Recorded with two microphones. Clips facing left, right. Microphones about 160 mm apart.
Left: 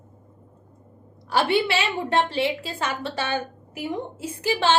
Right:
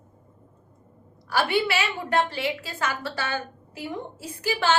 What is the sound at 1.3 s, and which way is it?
A woman's voice, 25° left (ahead or behind).